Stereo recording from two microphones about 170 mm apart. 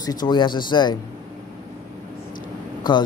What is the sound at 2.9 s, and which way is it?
Speech, 25° left (ahead or behind).